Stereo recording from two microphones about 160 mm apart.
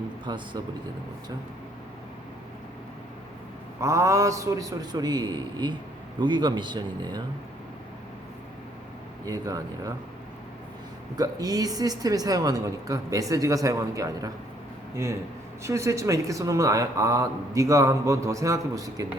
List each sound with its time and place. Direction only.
0.3 s speech: 30° right (ahead or behind)
3.8 s speech: 20° right (ahead or behind)
9.2 s speech: 20° right (ahead or behind)
11.2 s speech: 25° right (ahead or behind)
15.6 s speech: 20° right (ahead or behind)